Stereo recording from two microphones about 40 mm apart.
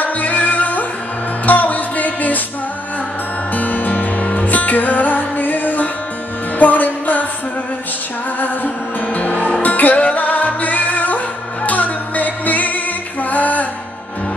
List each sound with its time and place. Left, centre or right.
0.0 s music: left
3.5 s music: left
8.4 s music: left